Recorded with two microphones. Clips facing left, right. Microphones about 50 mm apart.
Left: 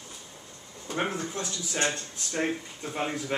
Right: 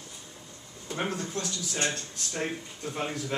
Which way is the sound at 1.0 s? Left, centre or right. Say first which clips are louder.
Left 1 dB; centre.